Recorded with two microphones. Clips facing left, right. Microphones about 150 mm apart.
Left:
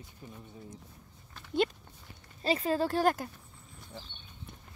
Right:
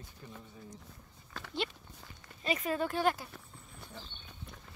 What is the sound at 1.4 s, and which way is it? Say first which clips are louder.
Dog: right 7 dB; 90° right.